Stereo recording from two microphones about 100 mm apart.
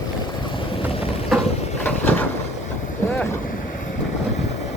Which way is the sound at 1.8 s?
20° left (ahead or behind).